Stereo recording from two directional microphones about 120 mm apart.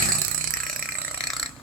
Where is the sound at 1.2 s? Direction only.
Centre (ahead or behind).